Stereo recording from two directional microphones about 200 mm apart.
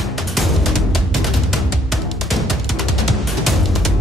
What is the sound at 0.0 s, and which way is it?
Music, centre (ahead or behind).